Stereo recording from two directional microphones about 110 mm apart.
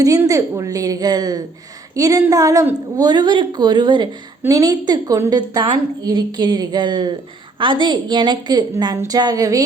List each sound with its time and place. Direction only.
0.3 s a woman's voice: 30° right (ahead or behind)
4.4 s a woman's voice: 30° right (ahead or behind)